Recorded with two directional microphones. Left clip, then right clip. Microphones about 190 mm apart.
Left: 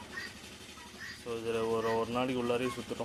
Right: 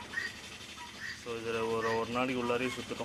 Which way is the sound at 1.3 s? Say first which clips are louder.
Left 1 dB; 15° left (ahead or behind).